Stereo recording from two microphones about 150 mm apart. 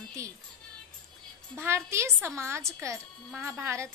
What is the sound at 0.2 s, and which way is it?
Music, 20° right (ahead or behind).